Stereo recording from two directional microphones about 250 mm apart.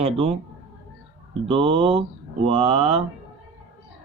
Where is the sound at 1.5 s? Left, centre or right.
Right.